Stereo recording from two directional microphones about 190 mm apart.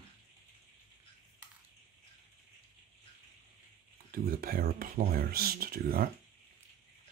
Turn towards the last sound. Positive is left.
turn(degrees=-50)  # may be behind; listen again after turning